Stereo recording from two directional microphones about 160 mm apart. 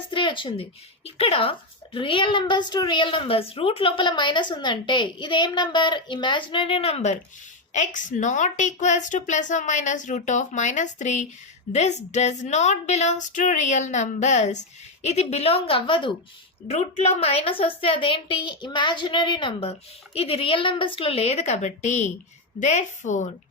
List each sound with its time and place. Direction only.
0.1 s speech: 30° left (ahead or behind)
16.6 s speech: 40° left (ahead or behind)